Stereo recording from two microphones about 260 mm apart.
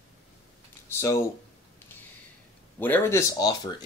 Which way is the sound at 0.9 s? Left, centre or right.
Centre.